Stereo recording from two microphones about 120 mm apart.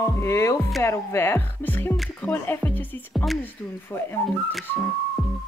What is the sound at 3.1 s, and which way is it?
Speech, centre (ahead or behind).